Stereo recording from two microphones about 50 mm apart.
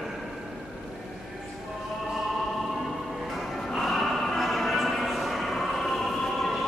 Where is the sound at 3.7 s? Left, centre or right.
Centre.